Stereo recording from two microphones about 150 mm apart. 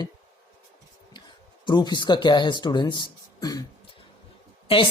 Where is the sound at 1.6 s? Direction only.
30° left (ahead or behind).